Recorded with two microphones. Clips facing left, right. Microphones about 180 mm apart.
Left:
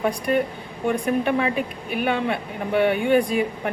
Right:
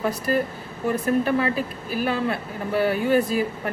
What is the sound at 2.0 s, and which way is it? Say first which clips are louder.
Speech: left 1 dB; centre (ahead or behind).